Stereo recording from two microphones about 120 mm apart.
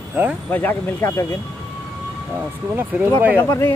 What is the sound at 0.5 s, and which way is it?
Speech, 15° left (ahead or behind).